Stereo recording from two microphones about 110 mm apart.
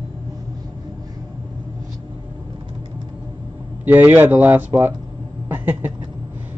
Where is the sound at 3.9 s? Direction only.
15° right (ahead or behind).